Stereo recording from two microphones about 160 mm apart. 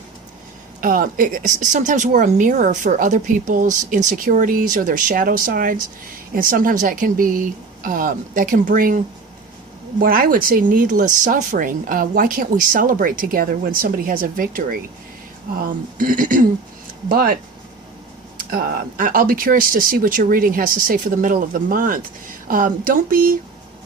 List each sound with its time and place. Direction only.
0.8 s speech: 60° right (ahead or behind)
10.0 s speech: 65° right (ahead or behind)
16.0 s speech: 55° right (ahead or behind)
17.1 s speech: 65° right (ahead or behind)
18.5 s speech: 60° right (ahead or behind)